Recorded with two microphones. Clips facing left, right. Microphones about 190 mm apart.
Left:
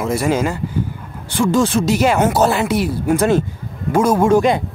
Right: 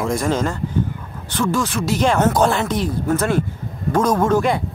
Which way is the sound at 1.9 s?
10° left (ahead or behind).